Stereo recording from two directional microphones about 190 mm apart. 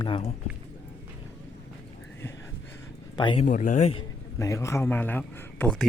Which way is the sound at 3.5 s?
45° left (ahead or behind).